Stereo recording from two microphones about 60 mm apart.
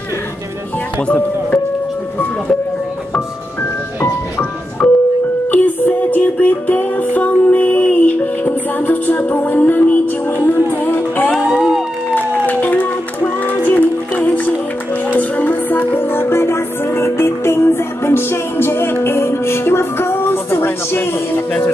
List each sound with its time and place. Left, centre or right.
1.0 s speech: left
4.8 s music: centre
5.5 s music: left
11.3 s music: centre
12.2 s music: left